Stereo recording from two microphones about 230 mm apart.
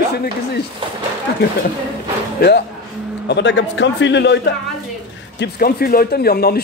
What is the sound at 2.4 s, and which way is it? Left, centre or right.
Speech, left.